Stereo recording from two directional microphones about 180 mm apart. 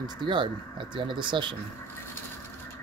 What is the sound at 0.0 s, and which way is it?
Speech, 25° right (ahead or behind).